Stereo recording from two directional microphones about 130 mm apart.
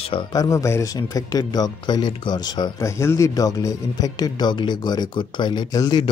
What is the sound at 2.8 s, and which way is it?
Speech, 20° left (ahead or behind).